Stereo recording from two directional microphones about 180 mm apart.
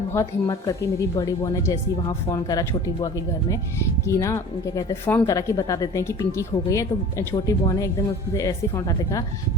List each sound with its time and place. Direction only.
0.1 s speech: 15° left (ahead or behind)